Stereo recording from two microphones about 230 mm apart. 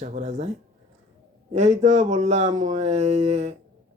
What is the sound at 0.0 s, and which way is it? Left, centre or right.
Speech, right.